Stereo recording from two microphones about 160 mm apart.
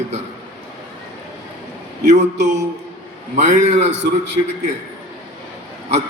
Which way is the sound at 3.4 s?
45° right (ahead or behind).